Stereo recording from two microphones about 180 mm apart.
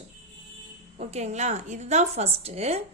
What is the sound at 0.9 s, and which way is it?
A woman's voice, 40° right (ahead or behind).